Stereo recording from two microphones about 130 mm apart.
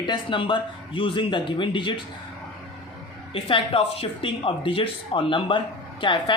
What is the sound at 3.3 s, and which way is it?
Speech, 45° left (ahead or behind).